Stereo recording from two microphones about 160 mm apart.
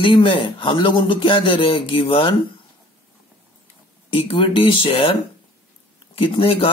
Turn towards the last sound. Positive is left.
turn(degrees=35)  # may be behind; listen again after turning